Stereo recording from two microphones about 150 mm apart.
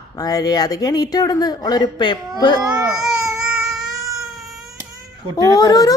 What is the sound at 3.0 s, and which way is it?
Baby cry, 5° right (ahead or behind).